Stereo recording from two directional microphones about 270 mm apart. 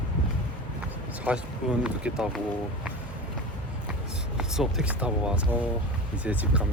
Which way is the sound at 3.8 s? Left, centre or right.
Centre.